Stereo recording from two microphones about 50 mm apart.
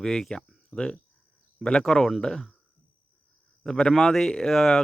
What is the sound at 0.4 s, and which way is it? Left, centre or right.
Cricket, centre.